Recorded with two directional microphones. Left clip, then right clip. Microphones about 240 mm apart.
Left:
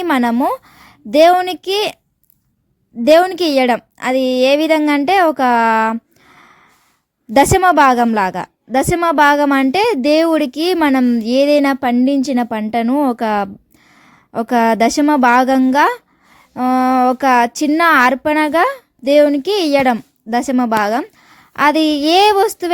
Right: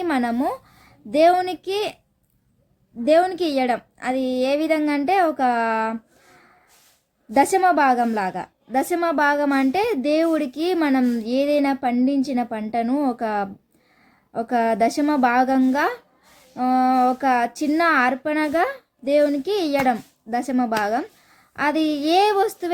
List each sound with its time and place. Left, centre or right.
0.0 s a woman's voice: left
3.0 s a woman's voice: left
7.3 s a woman's voice: left